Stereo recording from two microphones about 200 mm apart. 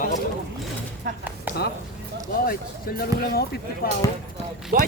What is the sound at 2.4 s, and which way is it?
Speech, 45° left (ahead or behind).